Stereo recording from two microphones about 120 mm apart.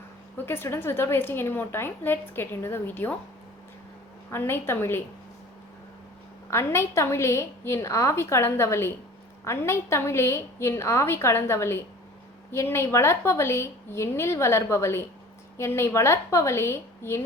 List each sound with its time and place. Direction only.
0.4 s a woman's voice: 20° left (ahead or behind)
4.3 s a woman's voice: 20° left (ahead or behind)
6.5 s a woman's voice: 20° left (ahead or behind)